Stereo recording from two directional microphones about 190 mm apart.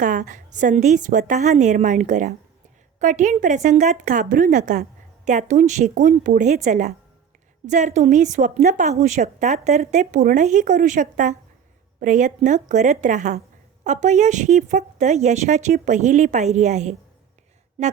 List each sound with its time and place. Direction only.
0.0 s a woman's voice: 45° right (ahead or behind)